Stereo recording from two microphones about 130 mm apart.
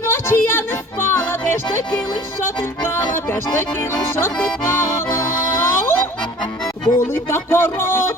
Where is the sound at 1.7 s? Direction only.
20° left (ahead or behind).